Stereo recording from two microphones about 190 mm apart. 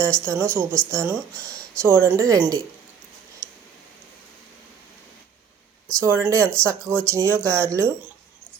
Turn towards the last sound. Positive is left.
turn(degrees=-15)  # may be behind; listen again after turning